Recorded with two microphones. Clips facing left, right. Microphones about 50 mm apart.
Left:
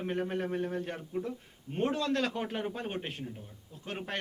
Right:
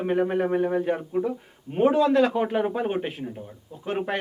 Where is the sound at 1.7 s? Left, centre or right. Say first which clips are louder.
Right 11 dB; centre.